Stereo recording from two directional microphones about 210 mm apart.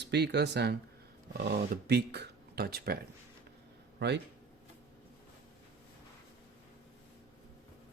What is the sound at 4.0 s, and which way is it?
Speech, 55° right (ahead or behind).